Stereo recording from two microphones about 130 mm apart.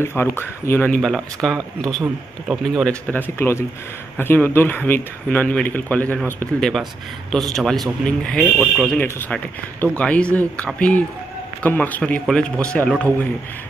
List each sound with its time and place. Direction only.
0.0 s speech: 20° left (ahead or behind)
3.1 s speech: 15° left (ahead or behind); by 8.9 s 5° right (ahead or behind)
8.9 s speech: 15° left (ahead or behind)